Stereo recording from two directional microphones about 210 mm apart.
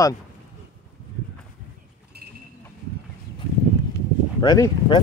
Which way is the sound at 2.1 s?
50° right (ahead or behind).